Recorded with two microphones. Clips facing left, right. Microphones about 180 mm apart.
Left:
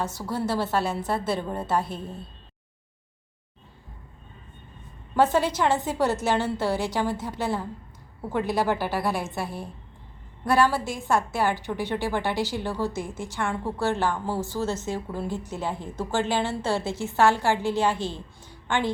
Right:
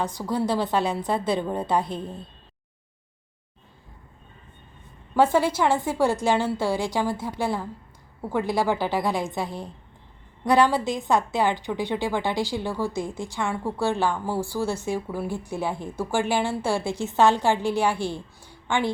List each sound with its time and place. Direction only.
0.2 s a woman's voice: 15° right (ahead or behind)
5.1 s a woman's voice: 10° right (ahead or behind)